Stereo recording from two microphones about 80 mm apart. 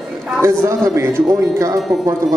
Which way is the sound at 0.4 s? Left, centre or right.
Right.